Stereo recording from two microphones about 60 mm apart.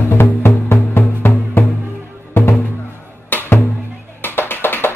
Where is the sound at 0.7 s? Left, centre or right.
Left.